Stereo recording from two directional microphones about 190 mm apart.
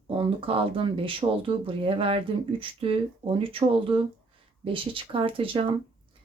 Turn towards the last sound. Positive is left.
turn(degrees=-30)  # may be behind; listen again after turning